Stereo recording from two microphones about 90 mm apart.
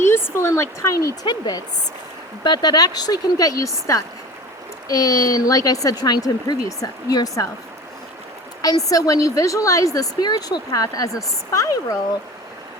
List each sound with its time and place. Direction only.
0.0 s speech: 25° left (ahead or behind)
1.2 s a woman's voice: 50° left (ahead or behind)
8.6 s a woman's voice: 40° left (ahead or behind)